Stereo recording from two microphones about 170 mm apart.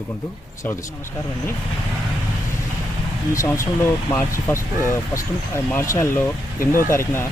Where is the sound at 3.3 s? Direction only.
15° left (ahead or behind).